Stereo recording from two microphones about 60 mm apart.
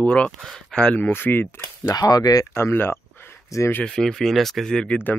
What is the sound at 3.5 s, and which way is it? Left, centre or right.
Speech, left.